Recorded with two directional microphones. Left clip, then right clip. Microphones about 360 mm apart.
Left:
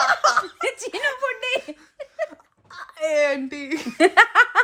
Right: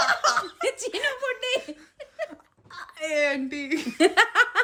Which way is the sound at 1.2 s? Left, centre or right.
Centre.